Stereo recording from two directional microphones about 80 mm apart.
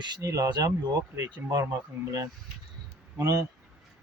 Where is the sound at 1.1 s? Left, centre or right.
Right.